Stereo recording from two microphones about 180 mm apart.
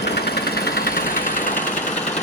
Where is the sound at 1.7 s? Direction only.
45° left (ahead or behind).